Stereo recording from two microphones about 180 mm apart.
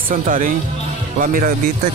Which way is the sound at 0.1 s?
50° right (ahead or behind).